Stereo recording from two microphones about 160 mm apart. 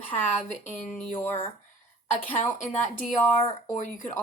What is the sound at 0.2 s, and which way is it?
Speech, 45° left (ahead or behind).